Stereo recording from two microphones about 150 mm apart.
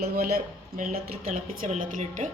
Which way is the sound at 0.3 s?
90° right.